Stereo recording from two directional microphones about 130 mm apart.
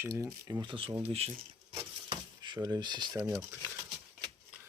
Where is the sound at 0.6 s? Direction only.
40° right (ahead or behind).